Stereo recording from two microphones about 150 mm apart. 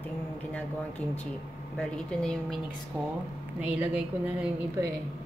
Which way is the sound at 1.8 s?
5° left (ahead or behind).